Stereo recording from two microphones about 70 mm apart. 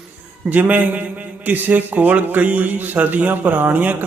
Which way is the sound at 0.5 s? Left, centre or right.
Right.